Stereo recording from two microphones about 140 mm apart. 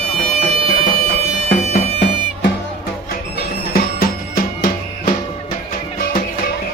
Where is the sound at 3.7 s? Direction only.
90° left.